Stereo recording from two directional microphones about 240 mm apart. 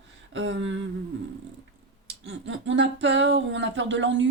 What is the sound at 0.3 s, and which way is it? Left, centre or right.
Speech, right.